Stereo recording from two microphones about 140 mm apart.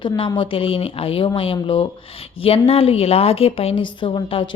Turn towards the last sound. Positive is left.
turn(degrees=40)  # may be behind; listen again after turning